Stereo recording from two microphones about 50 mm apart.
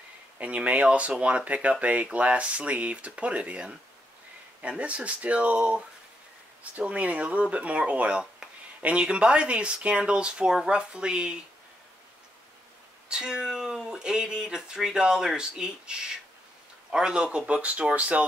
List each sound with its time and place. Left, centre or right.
0.4 s speech: right
13.1 s speech: centre